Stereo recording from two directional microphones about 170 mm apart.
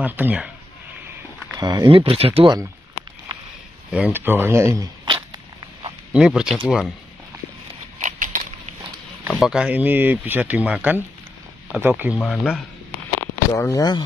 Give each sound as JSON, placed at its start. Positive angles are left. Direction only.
{"t": 0.0, "sound": "speech", "side_deg": -10}
{"t": 1.6, "sound": "speech", "side_deg": -25}
{"t": 3.9, "sound": "speech", "side_deg": -10}
{"t": 5.1, "sound": "a sound", "side_deg": -25}
{"t": 6.1, "sound": "speech", "side_deg": -5}
{"t": 8.0, "sound": "a sound", "side_deg": -50}
{"t": 9.3, "sound": "speech", "side_deg": -5}
{"t": 12.2, "sound": "speech", "side_deg": 5}
{"t": 13.5, "sound": "speech", "side_deg": 20}